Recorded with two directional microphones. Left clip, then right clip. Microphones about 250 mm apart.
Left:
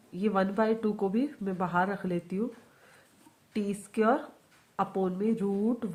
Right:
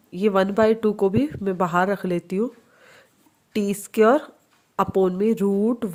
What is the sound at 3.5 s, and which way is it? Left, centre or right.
Speech, right.